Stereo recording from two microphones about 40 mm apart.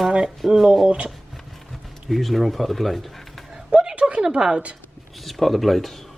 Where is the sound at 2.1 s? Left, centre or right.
Centre.